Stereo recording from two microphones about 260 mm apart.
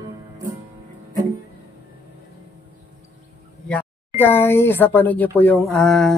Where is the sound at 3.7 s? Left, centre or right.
Centre.